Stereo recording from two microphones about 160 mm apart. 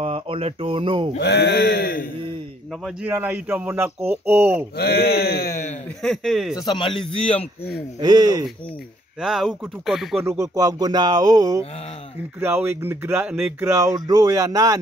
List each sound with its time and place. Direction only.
0.0 s speech: 35° right (ahead or behind)
1.1 s speech: 90° left
2.8 s speech: 10° right (ahead or behind)
4.7 s speech: 90° left
6.0 s speech: centre (ahead or behind)
6.5 s speech: 30° left (ahead or behind)
8.0 s speech: 25° right (ahead or behind)
9.2 s speech: centre (ahead or behind)
10.2 s speech: 20° right (ahead or behind)